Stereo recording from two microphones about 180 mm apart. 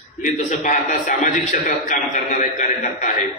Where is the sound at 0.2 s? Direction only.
45° left (ahead or behind).